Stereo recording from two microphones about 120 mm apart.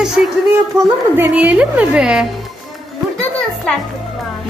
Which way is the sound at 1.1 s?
15° right (ahead or behind).